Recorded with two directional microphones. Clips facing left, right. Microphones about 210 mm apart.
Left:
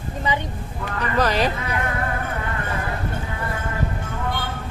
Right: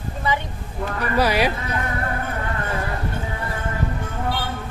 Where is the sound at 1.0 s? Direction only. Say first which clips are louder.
Right 1 dB; 10° right (ahead or behind).